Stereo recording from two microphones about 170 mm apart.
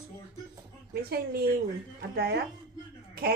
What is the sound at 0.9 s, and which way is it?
A woman's voice, 65° right (ahead or behind).